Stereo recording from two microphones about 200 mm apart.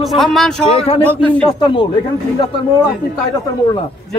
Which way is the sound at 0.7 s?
30° left (ahead or behind).